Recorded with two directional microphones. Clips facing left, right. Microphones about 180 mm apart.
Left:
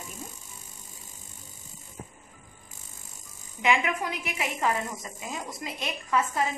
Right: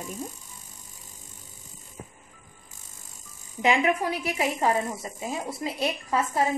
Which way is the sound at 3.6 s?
35° right (ahead or behind).